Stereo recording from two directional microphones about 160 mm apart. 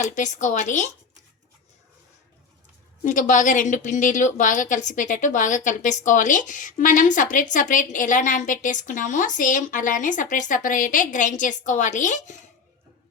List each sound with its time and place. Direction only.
0.0 s a woman's voice: 50° left (ahead or behind)
3.0 s a woman's voice: 55° left (ahead or behind)